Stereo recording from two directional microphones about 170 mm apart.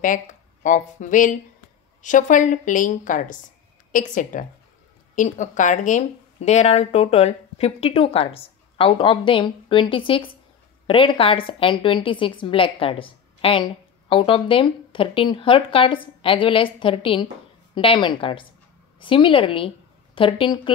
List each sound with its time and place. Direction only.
0.0 s a woman's voice: 50° left (ahead or behind); by 20.7 s 30° left (ahead or behind)